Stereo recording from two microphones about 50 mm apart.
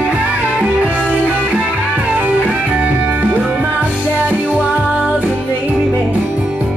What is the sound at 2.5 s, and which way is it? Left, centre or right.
Music, right.